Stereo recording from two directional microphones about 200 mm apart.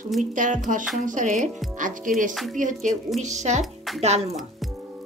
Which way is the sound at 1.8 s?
40° right (ahead or behind).